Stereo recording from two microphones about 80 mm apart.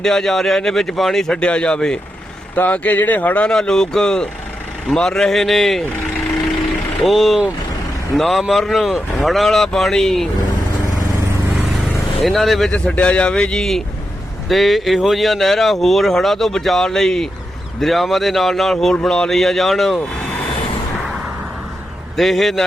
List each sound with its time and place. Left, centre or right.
0.0 s speech: centre
7.0 s speech: centre
12.2 s speech: centre
12.7 s speech: centre
22.1 s speech: centre